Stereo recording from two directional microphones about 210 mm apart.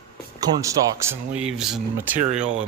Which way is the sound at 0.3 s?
15° right (ahead or behind).